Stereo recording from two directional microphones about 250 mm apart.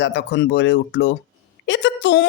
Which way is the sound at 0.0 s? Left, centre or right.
Left.